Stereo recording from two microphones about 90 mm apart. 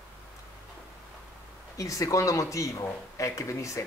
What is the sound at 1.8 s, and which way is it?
Speech, 40° left (ahead or behind).